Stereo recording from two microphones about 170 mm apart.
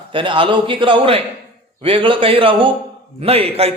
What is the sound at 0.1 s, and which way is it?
A man's voice, 30° right (ahead or behind).